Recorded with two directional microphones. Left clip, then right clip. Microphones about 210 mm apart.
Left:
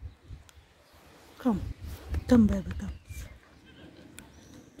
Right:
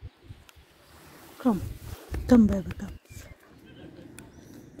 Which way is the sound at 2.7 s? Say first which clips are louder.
Right 1 dB; 5° left (ahead or behind).